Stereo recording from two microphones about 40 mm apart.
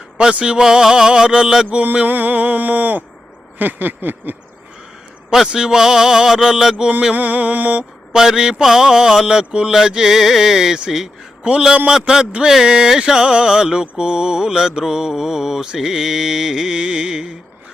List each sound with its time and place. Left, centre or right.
0.2 s a sound: right
2.0 s mantra: right
3.6 s a sound: right
5.5 s mantra: centre
7.1 s mantra: right
8.1 s mantra: centre
11.9 s mantra: centre